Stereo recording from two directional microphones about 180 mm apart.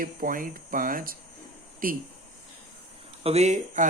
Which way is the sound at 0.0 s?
50° right (ahead or behind).